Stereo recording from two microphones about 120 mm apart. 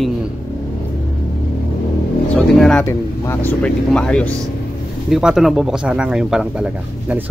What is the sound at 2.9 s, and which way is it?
Speech, 20° left (ahead or behind).